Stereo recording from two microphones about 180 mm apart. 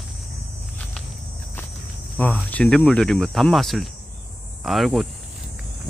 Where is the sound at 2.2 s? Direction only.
10° left (ahead or behind).